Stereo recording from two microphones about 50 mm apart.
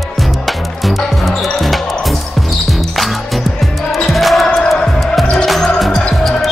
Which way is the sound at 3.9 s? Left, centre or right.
Centre.